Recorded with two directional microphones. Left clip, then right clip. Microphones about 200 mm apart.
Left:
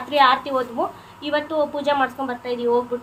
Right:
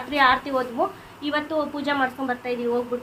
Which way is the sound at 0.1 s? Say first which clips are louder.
Left 3 dB; centre (ahead or behind).